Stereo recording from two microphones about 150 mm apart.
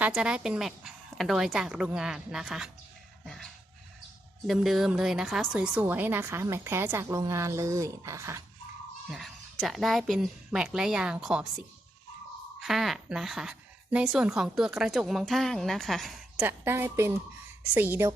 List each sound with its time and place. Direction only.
0.0 s a woman's voice: 5° right (ahead or behind)
3.2 s dog: 5° left (ahead or behind)
4.4 s a woman's voice: centre (ahead or behind); by 8.4 s 20° right (ahead or behind)
9.0 s a woman's voice: centre (ahead or behind)
12.5 s a woman's voice: centre (ahead or behind)
16.5 s a woman's voice: 15° right (ahead or behind)